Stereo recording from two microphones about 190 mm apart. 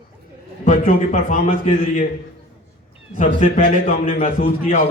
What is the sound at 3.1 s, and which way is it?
A man's voice, 40° left (ahead or behind).